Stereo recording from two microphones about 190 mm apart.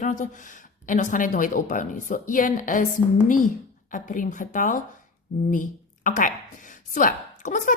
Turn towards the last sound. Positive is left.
turn(degrees=40)  # may be behind; listen again after turning